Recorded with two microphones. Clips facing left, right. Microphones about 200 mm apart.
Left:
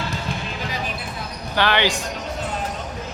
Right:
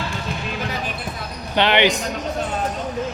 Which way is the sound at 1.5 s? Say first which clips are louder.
Right 3 dB; 20° right (ahead or behind).